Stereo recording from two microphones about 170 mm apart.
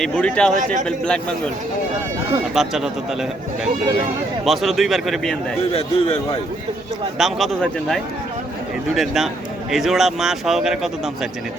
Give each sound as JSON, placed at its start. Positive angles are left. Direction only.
{"t": 0.0, "sound": "speech", "side_deg": 5}
{"t": 0.5, "sound": "speech", "side_deg": -50}
{"t": 0.9, "sound": "speech", "side_deg": 5}
{"t": 2.6, "sound": "speech", "side_deg": 0}
{"t": 4.4, "sound": "speech", "side_deg": 0}
{"t": 5.7, "sound": "a man's voice", "side_deg": 35}
{"t": 7.2, "sound": "speech", "side_deg": 0}